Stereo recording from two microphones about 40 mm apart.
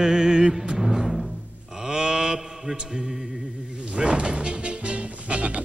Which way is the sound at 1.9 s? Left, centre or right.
Centre.